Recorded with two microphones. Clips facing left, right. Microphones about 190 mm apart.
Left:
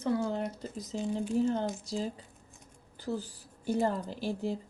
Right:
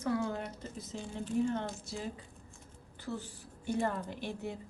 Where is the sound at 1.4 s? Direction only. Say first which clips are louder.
Left 3 dB; 35° left (ahead or behind).